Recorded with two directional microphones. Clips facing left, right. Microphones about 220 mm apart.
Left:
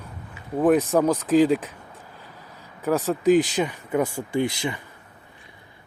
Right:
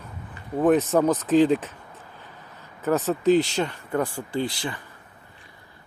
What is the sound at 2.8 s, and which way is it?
Speech, 10° left (ahead or behind).